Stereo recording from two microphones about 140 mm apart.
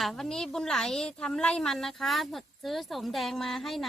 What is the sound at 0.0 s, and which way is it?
A woman's voice, 5° left (ahead or behind).